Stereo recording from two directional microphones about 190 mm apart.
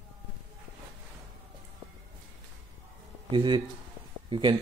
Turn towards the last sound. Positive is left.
turn(degrees=-25)  # may be behind; listen again after turning